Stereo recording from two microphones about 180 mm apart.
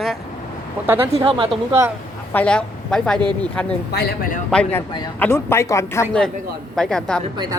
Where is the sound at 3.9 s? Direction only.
50° left (ahead or behind).